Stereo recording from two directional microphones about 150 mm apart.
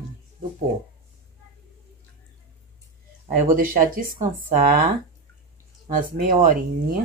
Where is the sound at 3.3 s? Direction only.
65° right (ahead or behind).